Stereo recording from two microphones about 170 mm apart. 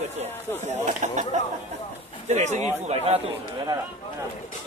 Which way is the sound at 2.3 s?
40° right (ahead or behind).